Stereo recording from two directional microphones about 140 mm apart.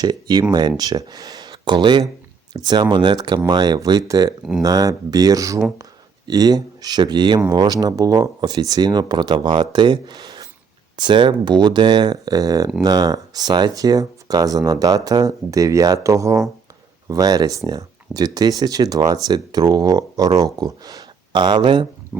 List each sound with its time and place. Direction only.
0.0 s speech: 30° right (ahead or behind)
22.1 s speech: 10° right (ahead or behind)